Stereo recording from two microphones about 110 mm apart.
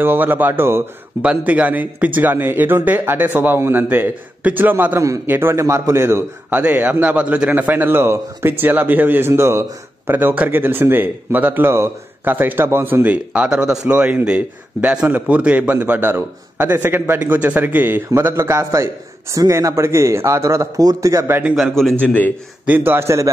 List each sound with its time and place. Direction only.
0.0 s a man's voice: 20° right (ahead or behind)
6.6 s a man's voice: 10° right (ahead or behind)
21.5 s a man's voice: centre (ahead or behind)
22.0 s a man's voice: 15° left (ahead or behind)
22.7 s speech: 20° right (ahead or behind)